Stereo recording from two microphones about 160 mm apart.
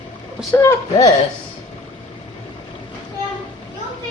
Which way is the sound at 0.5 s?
20° left (ahead or behind).